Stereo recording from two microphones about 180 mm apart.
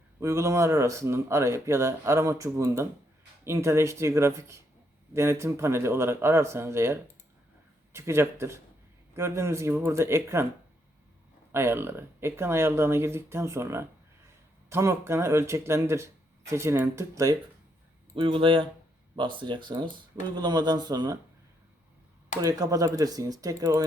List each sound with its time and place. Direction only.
0.2 s speech: 15° right (ahead or behind)
11.5 s speech: 15° right (ahead or behind)
18.1 s speech: 30° right (ahead or behind)
22.4 s speech: 20° right (ahead or behind)